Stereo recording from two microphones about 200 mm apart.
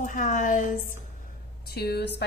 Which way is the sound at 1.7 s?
55° left (ahead or behind).